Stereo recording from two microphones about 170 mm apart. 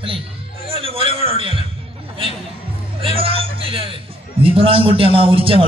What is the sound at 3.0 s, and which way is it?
A man's voice, 35° right (ahead or behind).